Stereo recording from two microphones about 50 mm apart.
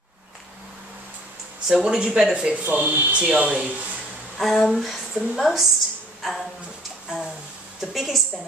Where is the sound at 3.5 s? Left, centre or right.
Centre.